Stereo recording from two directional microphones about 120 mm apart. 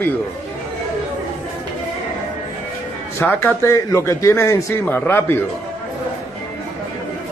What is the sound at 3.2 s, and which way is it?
Speech, 20° left (ahead or behind).